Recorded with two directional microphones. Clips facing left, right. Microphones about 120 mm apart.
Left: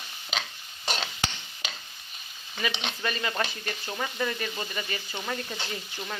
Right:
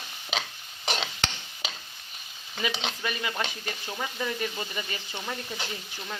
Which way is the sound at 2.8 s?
5° right (ahead or behind).